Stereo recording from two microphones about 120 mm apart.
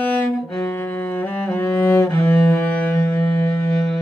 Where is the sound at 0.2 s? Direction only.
15° left (ahead or behind).